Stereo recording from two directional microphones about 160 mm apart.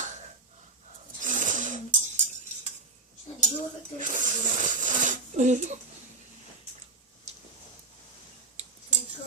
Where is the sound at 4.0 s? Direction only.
55° right (ahead or behind).